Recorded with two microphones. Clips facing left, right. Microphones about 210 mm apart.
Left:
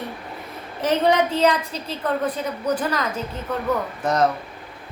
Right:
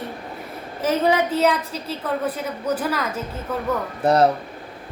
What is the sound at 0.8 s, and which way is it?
Child singing, 5° right (ahead or behind).